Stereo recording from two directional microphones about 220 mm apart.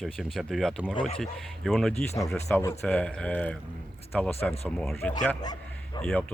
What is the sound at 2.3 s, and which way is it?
Speech, 10° left (ahead or behind).